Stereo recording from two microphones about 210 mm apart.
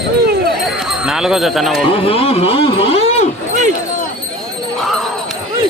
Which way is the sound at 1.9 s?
25° left (ahead or behind).